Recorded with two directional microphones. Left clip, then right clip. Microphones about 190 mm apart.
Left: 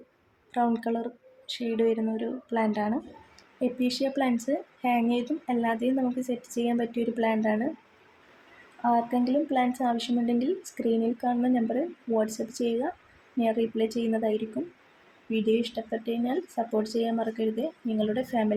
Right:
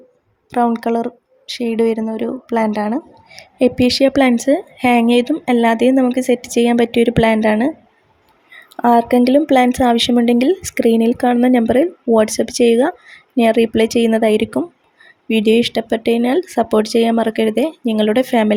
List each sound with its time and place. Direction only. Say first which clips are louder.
0.5 s speech: right 11 dB; 45° right (ahead or behind)
8.8 s speech: right 13 dB; 60° right (ahead or behind)